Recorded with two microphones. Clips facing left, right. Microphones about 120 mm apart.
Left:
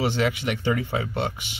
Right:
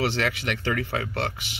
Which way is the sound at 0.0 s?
15° left (ahead or behind).